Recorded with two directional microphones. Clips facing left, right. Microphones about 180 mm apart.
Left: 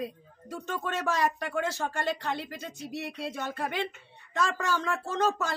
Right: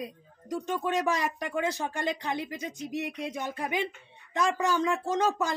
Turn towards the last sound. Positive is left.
turn(degrees=-15)  # may be behind; listen again after turning